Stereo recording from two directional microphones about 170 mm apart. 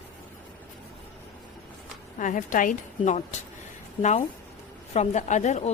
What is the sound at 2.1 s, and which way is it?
A woman's voice, 50° left (ahead or behind).